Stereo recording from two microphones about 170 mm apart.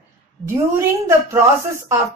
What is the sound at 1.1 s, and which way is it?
Speech, 15° right (ahead or behind).